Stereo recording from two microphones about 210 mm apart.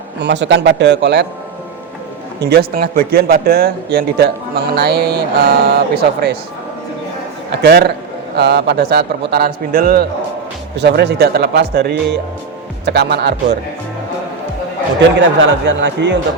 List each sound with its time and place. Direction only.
0.2 s a man's voice: 55° right (ahead or behind)
2.4 s speech: 50° right (ahead or behind)
7.5 s speech: 45° right (ahead or behind)
15.2 s a man's voice: 60° right (ahead or behind)